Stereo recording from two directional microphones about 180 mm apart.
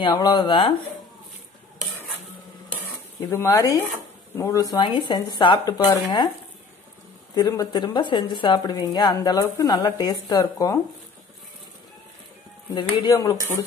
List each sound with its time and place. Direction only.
0.0 s a woman's voice: 25° left (ahead or behind)
3.2 s a woman's voice: 15° left (ahead or behind)
7.3 s a woman's voice: 20° left (ahead or behind)
12.7 s a woman's voice: 25° left (ahead or behind)